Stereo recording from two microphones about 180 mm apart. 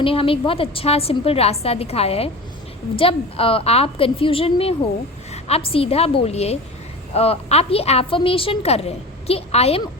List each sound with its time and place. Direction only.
0.0 s a woman's voice: 30° left (ahead or behind)